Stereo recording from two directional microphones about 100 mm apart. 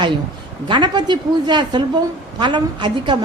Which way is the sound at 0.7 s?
45° right (ahead or behind).